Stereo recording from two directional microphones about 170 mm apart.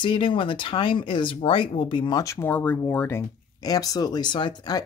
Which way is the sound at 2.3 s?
10° left (ahead or behind).